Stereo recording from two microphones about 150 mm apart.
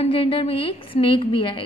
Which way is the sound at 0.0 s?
40° left (ahead or behind).